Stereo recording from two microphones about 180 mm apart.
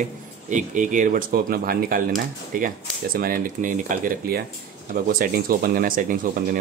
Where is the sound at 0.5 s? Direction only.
45° right (ahead or behind).